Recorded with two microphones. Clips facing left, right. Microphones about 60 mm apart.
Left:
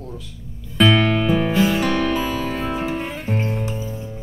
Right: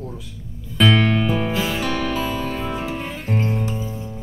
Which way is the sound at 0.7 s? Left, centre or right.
Centre.